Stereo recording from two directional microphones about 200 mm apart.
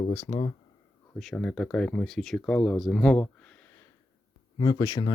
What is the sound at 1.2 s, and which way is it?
Speech, centre (ahead or behind).